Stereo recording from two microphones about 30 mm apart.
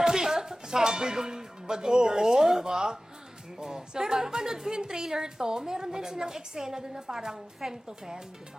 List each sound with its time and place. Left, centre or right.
0.0 s a woman's voice: centre